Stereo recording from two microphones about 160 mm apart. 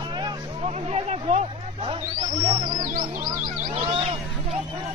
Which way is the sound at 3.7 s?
40° right (ahead or behind).